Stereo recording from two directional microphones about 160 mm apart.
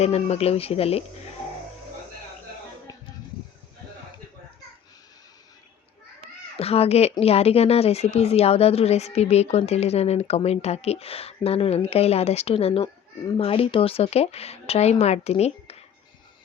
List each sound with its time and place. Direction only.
0.0 s speech: 40° left (ahead or behind)
2.9 s a sound: 20° left (ahead or behind)
6.6 s speech: 40° left (ahead or behind)